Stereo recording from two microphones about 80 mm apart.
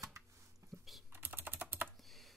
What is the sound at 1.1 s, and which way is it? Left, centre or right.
Typing, right.